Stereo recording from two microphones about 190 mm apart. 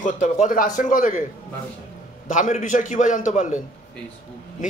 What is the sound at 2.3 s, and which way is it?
Speech, 40° left (ahead or behind).